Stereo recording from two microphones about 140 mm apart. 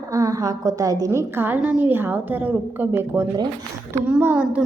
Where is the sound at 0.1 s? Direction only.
25° right (ahead or behind).